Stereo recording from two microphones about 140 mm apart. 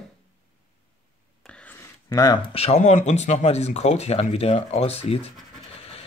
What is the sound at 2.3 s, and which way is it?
Speech, 40° left (ahead or behind).